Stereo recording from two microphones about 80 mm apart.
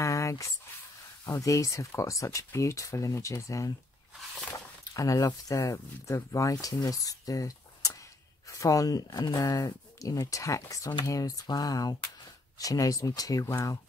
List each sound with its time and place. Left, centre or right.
0.0 s a sound: left
1.2 s speech: left
4.9 s speech: left